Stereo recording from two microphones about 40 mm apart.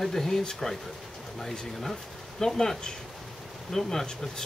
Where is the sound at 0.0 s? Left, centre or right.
Centre.